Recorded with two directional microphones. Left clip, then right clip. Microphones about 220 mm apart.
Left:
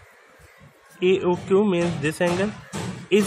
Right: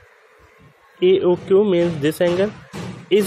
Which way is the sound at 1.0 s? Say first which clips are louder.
Right 5 dB; 10° right (ahead or behind).